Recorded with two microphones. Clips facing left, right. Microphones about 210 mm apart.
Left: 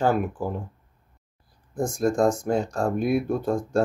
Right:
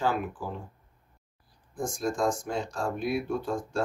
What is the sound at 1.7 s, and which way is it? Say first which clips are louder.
Speech: left 7 dB; 40° left (ahead or behind).